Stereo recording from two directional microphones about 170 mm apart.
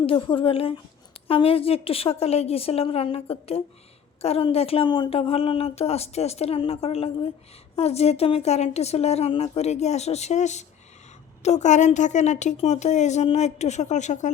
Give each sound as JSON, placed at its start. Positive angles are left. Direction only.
{"t": 0.0, "sound": "a woman's voice", "side_deg": 30}